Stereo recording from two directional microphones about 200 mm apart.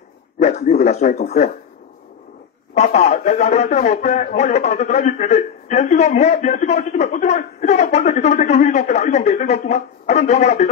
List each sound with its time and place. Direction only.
0.4 s a sound: 30° left (ahead or behind)
0.7 s speech: 35° left (ahead or behind)
2.7 s speech: 35° left (ahead or behind)